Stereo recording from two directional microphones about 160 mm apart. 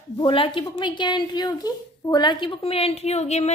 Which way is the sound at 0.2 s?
30° left (ahead or behind).